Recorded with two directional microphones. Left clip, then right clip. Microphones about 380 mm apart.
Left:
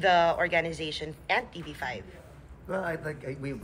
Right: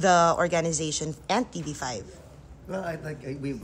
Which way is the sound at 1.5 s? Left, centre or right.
Centre.